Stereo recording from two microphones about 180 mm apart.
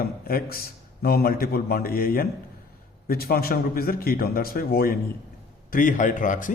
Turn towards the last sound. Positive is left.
turn(degrees=45)  # may be behind; listen again after turning